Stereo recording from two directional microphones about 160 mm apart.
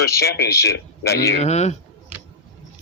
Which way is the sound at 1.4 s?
45° left (ahead or behind).